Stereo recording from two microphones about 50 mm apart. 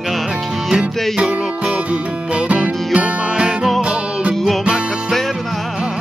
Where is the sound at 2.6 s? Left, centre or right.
Centre.